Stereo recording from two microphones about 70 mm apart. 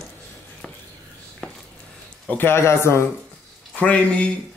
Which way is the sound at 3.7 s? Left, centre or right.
Centre.